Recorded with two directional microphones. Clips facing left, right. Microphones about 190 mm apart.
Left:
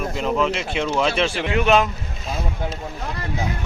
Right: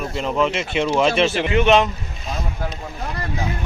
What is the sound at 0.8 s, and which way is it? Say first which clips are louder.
Speech: right 4 dB; 10° right (ahead or behind).